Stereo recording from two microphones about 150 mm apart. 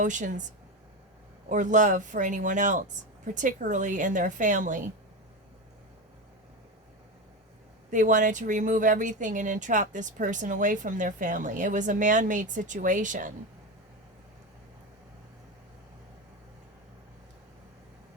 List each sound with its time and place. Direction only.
0.0 s speech: 55° right (ahead or behind)
1.5 s speech: 55° right (ahead or behind)
7.9 s speech: 60° right (ahead or behind)